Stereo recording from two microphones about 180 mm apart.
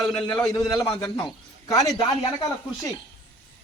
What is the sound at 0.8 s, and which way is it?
A man's voice, 20° left (ahead or behind).